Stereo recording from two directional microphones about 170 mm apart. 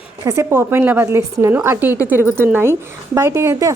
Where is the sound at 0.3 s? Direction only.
15° right (ahead or behind).